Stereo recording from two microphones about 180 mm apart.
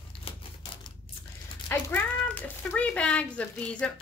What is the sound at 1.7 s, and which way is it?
Speech, 10° left (ahead or behind).